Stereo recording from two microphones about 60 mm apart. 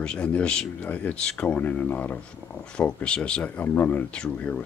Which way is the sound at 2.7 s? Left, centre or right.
Centre.